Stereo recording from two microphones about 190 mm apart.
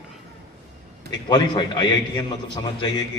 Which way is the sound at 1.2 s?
20° left (ahead or behind).